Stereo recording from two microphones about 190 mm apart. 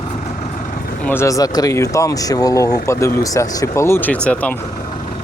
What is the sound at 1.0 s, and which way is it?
Speech, 15° left (ahead or behind).